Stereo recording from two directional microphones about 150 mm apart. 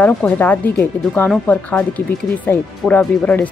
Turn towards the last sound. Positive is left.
turn(degrees=10)  # may be behind; listen again after turning